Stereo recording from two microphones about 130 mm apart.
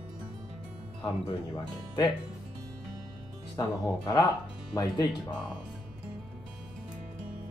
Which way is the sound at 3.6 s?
30° left (ahead or behind).